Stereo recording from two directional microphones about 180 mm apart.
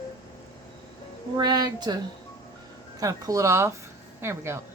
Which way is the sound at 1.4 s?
25° right (ahead or behind).